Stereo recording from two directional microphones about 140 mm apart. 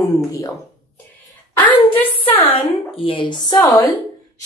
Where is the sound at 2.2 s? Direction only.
45° left (ahead or behind).